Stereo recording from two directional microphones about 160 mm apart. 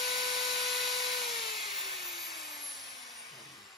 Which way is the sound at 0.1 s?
Centre (ahead or behind).